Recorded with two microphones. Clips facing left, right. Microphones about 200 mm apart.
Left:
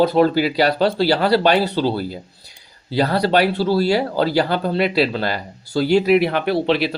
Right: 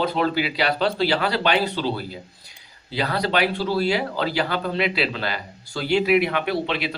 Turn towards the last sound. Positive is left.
turn(degrees=35)  # may be behind; listen again after turning